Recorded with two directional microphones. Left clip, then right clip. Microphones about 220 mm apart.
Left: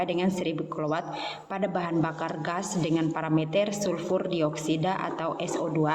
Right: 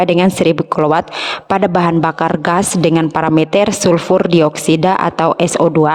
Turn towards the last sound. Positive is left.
turn(degrees=-50)  # may be behind; listen again after turning